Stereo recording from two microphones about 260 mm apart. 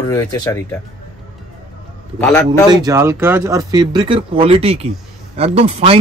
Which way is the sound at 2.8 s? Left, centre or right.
Centre.